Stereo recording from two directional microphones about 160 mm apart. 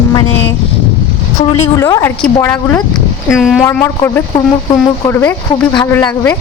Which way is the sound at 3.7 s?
15° left (ahead or behind).